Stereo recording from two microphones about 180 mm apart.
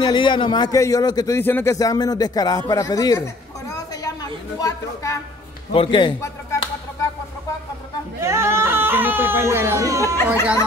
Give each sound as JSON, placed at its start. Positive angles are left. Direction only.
{"t": 0.0, "sound": "speech", "side_deg": 25}
{"t": 5.7, "sound": "a man's voice", "side_deg": 30}
{"t": 6.2, "sound": "finger snapping", "side_deg": 15}
{"t": 8.2, "sound": "speech", "side_deg": -15}